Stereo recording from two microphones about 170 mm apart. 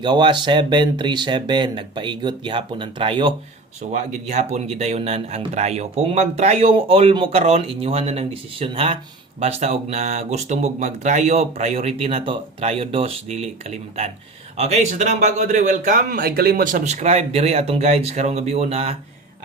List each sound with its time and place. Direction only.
0.0 s speech: 25° right (ahead or behind)
3.9 s speech: 45° right (ahead or behind)